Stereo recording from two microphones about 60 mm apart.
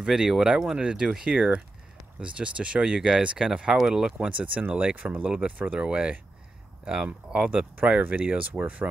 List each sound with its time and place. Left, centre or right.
0.0 s speech: centre
1.3 s speech: right
4.3 s speech: right